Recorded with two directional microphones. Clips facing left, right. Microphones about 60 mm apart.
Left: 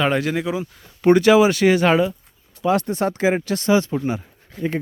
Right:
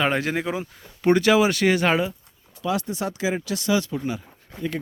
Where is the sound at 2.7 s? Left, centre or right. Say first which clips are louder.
Left 6 dB; left.